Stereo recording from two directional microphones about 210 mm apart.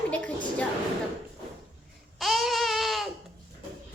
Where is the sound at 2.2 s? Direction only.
Centre (ahead or behind).